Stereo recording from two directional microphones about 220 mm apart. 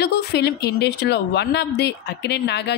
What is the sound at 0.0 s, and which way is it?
A woman's voice, 50° left (ahead or behind).